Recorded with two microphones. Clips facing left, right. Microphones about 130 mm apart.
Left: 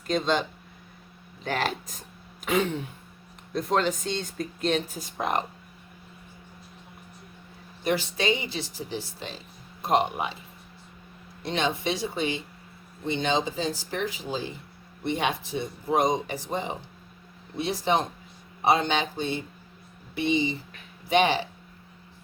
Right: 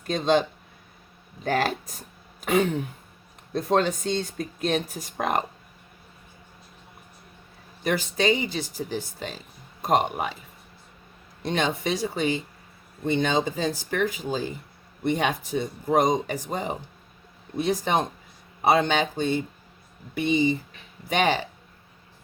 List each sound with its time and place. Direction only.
1.5 s speech: 40° right (ahead or behind)
2.4 s a sound: 45° right (ahead or behind)
3.7 s speech: 40° right (ahead or behind)
7.9 s speech: 45° right (ahead or behind)
11.4 s speech: 45° right (ahead or behind)